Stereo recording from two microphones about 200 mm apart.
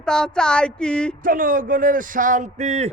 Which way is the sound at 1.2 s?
45° right (ahead or behind).